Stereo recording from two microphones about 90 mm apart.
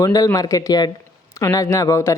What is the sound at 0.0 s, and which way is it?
Speech, 40° left (ahead or behind).